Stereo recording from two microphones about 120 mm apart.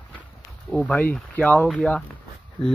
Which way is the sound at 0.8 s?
10° left (ahead or behind).